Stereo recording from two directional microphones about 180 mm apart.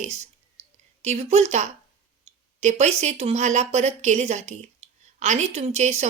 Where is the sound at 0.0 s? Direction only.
40° right (ahead or behind).